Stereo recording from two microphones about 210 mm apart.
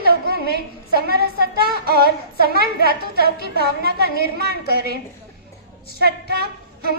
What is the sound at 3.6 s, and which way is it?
Speech, 50° right (ahead or behind).